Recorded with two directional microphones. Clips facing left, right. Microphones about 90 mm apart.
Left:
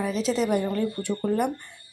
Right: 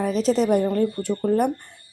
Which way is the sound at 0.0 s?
45° right (ahead or behind).